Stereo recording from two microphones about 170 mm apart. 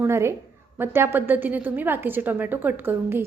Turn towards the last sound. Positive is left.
turn(degrees=-15)  # may be behind; listen again after turning